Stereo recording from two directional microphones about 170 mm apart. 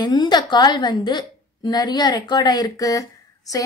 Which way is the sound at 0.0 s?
25° left (ahead or behind).